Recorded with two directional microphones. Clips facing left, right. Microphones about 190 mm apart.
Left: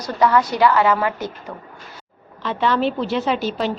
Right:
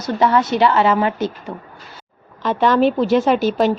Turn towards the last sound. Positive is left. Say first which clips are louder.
# right 6 dB
turn(degrees=-50)  # may be behind; listen again after turning